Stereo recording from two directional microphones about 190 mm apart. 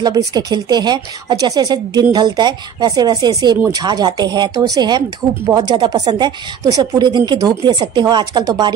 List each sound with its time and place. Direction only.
0.0 s speech: 20° right (ahead or behind)